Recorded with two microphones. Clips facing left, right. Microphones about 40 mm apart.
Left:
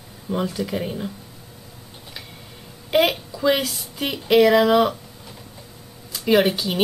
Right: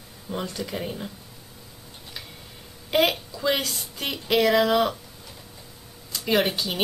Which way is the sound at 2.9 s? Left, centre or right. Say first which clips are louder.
Left 3 dB; centre.